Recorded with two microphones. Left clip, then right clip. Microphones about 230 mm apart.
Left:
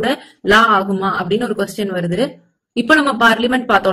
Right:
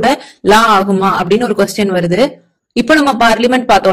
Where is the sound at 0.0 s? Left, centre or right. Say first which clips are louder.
Right 7 dB; right.